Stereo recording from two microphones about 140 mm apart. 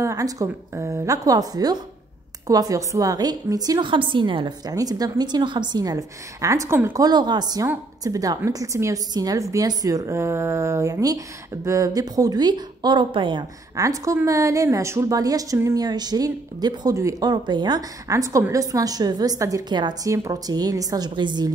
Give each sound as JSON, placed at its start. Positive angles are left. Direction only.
{"t": 0.0, "sound": "a woman's voice", "side_deg": -25}